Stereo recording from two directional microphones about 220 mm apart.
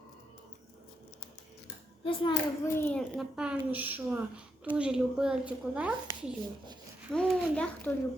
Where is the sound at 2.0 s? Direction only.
25° left (ahead or behind).